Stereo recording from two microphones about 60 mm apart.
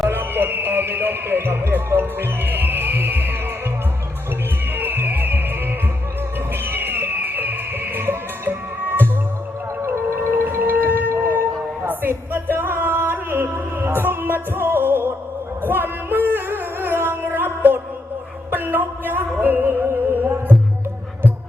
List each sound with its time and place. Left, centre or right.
0.1 s speech: right
4.7 s music: right
6.5 s music: right
9.8 s music: right
10.5 s music: right